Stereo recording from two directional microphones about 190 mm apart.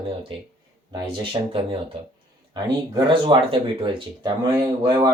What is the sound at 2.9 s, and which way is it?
Speech, 25° right (ahead or behind).